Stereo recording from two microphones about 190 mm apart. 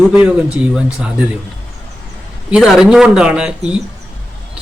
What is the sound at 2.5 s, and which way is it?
Speech, 5° right (ahead or behind).